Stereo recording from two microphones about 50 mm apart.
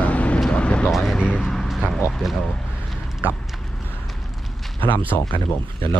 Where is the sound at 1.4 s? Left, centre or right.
Centre.